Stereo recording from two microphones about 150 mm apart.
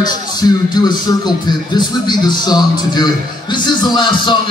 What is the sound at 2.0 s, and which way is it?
A man's voice, 30° left (ahead or behind).